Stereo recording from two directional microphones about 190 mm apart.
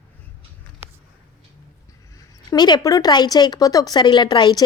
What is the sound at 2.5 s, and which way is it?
Speech, 20° left (ahead or behind).